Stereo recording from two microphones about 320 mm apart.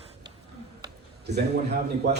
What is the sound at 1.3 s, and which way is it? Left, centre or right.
Speech, right.